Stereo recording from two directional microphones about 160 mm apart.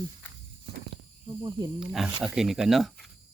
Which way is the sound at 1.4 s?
30° right (ahead or behind).